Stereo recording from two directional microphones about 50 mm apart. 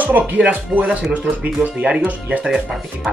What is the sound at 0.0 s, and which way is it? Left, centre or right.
Speech, right.